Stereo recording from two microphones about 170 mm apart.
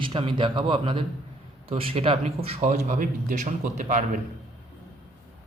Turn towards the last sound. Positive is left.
turn(degrees=-50)  # may be behind; listen again after turning